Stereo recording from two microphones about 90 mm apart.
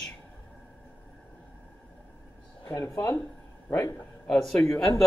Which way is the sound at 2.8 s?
35° left (ahead or behind).